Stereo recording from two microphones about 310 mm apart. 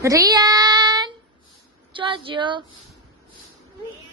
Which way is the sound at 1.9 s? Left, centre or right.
Centre.